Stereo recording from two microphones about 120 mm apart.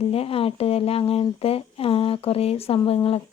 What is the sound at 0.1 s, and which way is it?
Speech, 55° left (ahead or behind).